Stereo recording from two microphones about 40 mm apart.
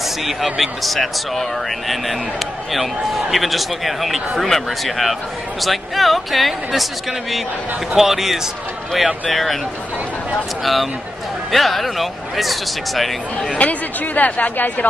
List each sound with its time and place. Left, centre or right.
0.2 s speech: centre
2.7 s speech: centre
10.6 s speech: centre
13.6 s speech: left